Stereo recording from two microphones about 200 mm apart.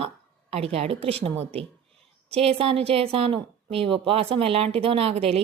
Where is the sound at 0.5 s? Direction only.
30° right (ahead or behind).